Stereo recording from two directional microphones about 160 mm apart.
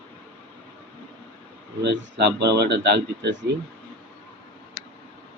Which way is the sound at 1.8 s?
90° right.